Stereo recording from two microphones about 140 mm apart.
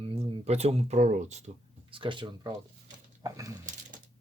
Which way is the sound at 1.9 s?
35° right (ahead or behind).